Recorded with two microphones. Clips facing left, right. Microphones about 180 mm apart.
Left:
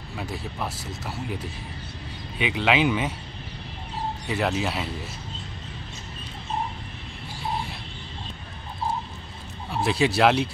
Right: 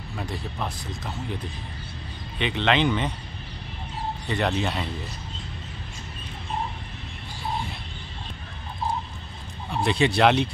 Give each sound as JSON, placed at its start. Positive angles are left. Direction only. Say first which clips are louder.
{"t": 0.2, "sound": "speech", "louder": "even", "side_deg": 5}
{"t": 4.3, "sound": "speech", "louder": "even", "side_deg": 5}
{"t": 9.7, "sound": "speech", "louder": "even", "side_deg": 0}